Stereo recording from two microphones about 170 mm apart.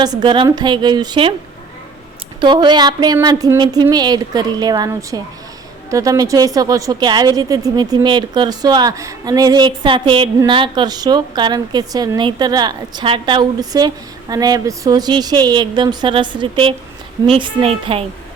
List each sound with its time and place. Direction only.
0.0 s a woman's voice: 25° right (ahead or behind)
2.4 s a woman's voice: 25° right (ahead or behind)